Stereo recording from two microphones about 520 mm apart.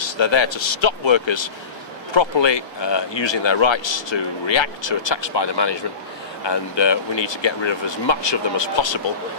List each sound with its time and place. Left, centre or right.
0.0 s a man's voice: left